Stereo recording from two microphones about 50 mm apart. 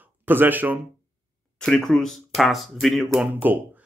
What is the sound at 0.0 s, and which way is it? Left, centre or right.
Speech, right.